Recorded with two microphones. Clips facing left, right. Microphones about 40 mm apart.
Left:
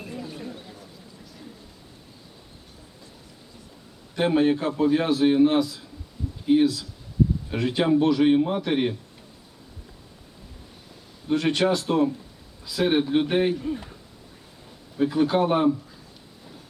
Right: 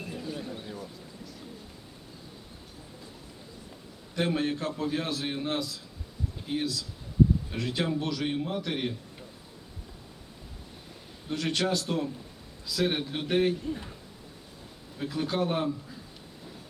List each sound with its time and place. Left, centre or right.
0.0 s a sound: centre
4.1 s a man's voice: left
11.3 s a man's voice: left
14.9 s a man's voice: left